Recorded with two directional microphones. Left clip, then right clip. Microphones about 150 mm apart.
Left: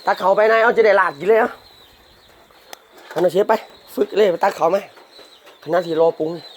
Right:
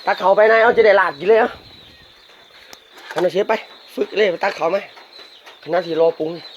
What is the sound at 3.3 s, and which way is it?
Speech, 15° left (ahead or behind).